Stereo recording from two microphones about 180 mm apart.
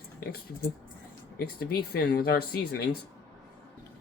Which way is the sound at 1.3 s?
55° left (ahead or behind).